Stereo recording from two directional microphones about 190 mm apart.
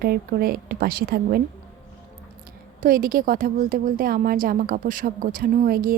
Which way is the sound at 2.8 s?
45° right (ahead or behind).